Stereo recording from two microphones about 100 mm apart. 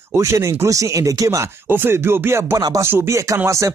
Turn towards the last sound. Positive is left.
turn(degrees=-30)  # may be behind; listen again after turning